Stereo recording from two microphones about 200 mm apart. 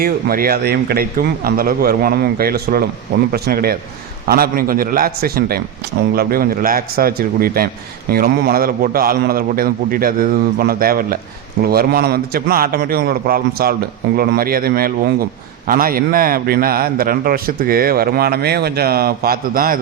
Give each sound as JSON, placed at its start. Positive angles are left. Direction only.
{"t": 0.0, "sound": "a man's voice", "side_deg": -50}